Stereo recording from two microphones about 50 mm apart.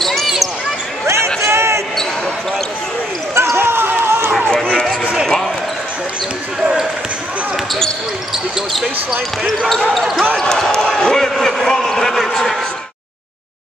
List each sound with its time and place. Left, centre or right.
0.0 s basketball bounce: centre
1.0 s basketball bounce: right
3.3 s basketball bounce: right
5.2 s basketball bounce: centre
6.6 s basketball bounce: centre
9.9 s speech: centre
10.3 s basketball bounce: centre